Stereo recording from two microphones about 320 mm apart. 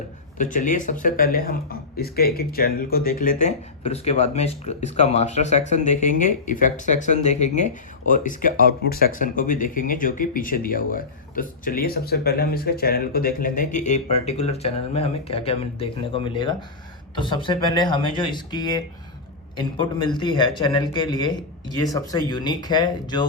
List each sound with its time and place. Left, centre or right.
0.3 s speech: left
19.8 s speech: centre